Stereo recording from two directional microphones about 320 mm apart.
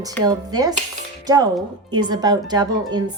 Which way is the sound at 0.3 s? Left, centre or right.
Centre.